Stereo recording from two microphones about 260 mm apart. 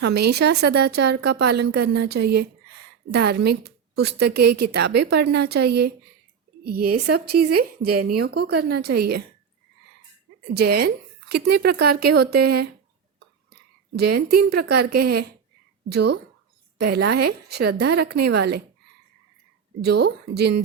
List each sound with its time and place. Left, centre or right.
0.0 s a woman's voice: right
6.9 s a woman's voice: right
10.5 s a woman's voice: right
13.1 s whispering: right
14.2 s a woman's voice: right
19.8 s a woman's voice: right